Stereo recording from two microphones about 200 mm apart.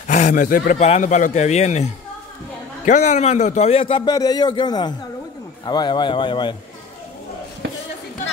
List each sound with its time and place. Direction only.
0.1 s a man's voice: 40° left (ahead or behind)